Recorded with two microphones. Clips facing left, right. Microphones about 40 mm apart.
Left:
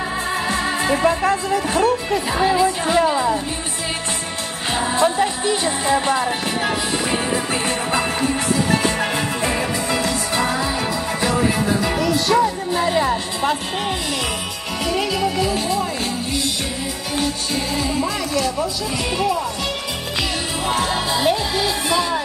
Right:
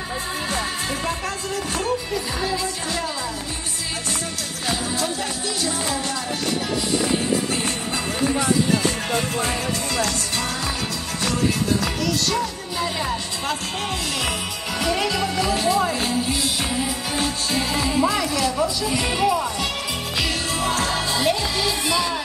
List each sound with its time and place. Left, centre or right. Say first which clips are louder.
0.5 s music: left 7 dB; left
4.6 s speech: left 7 dB; left
7.6 s music: left 5 dB; left
14.8 s speech: left 2 dB; centre
20.6 s speech: left 3 dB; centre